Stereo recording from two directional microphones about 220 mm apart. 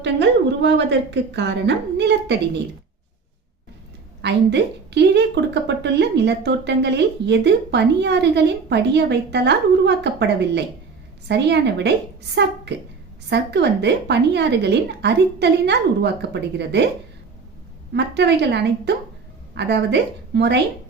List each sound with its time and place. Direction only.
0.0 s a woman's voice: 50° right (ahead or behind)
4.2 s a woman's voice: 50° right (ahead or behind)
17.9 s a woman's voice: 50° right (ahead or behind)